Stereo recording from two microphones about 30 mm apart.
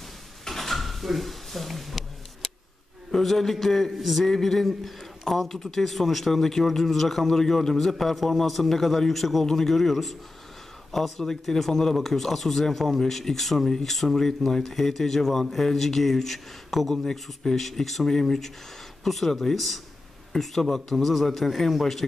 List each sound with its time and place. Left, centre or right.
0.5 s a sound: centre
3.1 s a man's voice: centre
4.3 s a man's voice: centre
5.5 s speech: centre
5.8 s a man's voice: centre
9.8 s a man's voice: centre
11.1 s speech: centre
16.9 s speech: centre